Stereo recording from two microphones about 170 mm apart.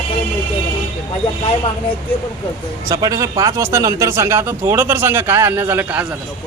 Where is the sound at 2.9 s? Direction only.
20° right (ahead or behind).